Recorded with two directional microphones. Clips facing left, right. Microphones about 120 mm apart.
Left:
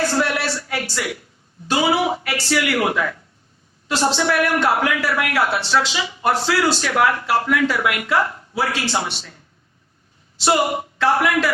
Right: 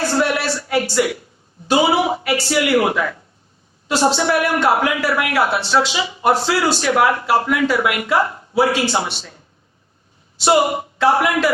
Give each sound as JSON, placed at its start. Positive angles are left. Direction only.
{"t": 0.4, "sound": "a sound", "side_deg": -20}
{"t": 1.7, "sound": "speech", "side_deg": -25}
{"t": 10.4, "sound": "speech", "side_deg": -20}